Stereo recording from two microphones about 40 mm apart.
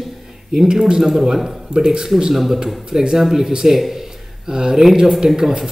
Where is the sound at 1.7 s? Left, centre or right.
Centre.